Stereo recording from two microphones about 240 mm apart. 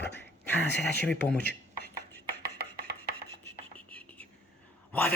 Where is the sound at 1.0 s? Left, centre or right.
Centre.